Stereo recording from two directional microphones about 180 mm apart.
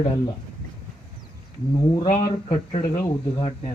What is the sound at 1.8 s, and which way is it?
Speech, 25° left (ahead or behind).